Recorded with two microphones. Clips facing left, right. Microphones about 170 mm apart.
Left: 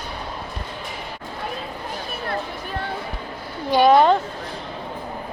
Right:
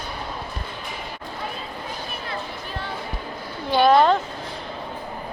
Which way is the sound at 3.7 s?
10° left (ahead or behind).